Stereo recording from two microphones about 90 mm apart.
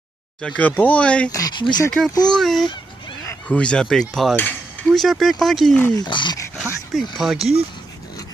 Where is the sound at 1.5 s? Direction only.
60° left (ahead or behind).